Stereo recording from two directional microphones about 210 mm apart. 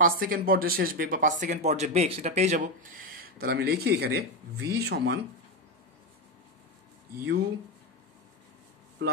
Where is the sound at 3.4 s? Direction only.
50° right (ahead or behind).